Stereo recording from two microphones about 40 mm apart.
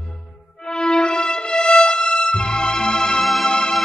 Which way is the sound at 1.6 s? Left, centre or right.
Left.